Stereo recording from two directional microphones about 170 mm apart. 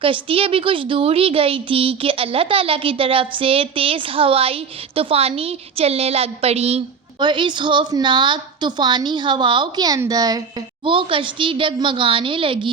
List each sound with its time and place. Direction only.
0.0 s a woman's voice: 30° right (ahead or behind)